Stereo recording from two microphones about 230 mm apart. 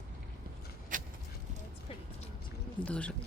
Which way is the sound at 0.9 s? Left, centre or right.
Right.